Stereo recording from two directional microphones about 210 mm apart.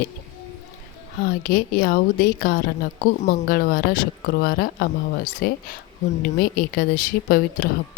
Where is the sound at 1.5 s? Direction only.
45° left (ahead or behind).